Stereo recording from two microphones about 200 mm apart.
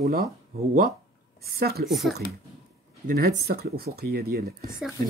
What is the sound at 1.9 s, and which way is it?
Speech, centre (ahead or behind).